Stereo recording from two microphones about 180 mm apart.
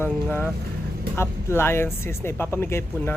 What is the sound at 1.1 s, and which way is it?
Speech, 15° left (ahead or behind).